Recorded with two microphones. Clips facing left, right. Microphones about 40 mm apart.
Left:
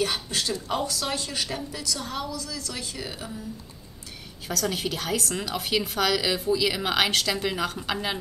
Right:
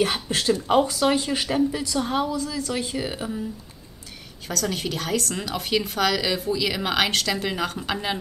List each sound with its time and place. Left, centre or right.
0.3 s a woman's voice: right
4.5 s speech: centre